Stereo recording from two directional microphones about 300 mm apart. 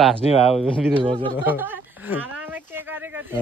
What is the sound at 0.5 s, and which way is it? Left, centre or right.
Speech, centre.